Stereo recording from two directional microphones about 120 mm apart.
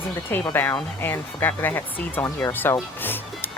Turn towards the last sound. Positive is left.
turn(degrees=20)  # may be behind; listen again after turning